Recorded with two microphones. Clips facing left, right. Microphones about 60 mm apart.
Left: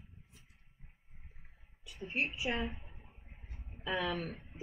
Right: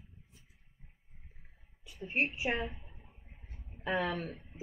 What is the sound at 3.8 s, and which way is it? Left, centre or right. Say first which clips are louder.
Speech: right 2 dB; right.